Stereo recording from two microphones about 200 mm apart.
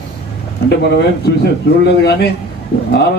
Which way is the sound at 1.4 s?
55° left (ahead or behind).